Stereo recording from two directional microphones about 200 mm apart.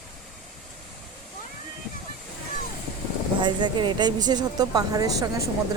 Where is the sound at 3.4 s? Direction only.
25° right (ahead or behind).